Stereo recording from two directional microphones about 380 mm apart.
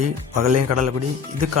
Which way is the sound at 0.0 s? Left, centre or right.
Right.